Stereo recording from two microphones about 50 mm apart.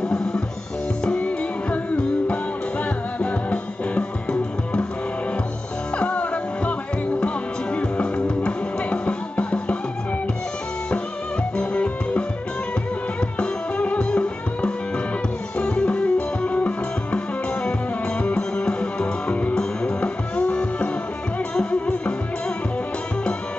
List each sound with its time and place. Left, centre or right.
1.0 s music: left
5.9 s music: left
11.5 s music: left
13.4 s music: left
18.2 s music: left